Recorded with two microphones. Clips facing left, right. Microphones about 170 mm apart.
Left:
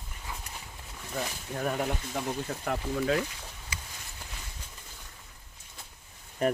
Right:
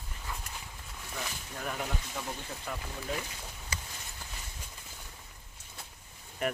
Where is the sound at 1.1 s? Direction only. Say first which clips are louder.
Left 7 dB; 45° left (ahead or behind).